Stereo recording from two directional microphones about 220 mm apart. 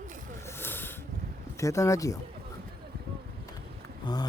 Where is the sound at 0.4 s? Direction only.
10° left (ahead or behind).